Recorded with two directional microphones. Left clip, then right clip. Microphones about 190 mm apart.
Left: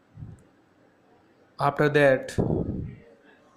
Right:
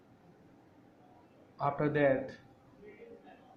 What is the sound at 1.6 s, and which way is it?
Speech, 55° left (ahead or behind).